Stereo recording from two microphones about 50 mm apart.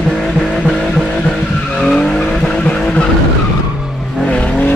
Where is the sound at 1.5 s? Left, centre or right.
Left.